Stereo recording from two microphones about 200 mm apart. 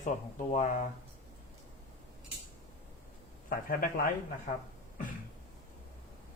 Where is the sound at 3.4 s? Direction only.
45° left (ahead or behind).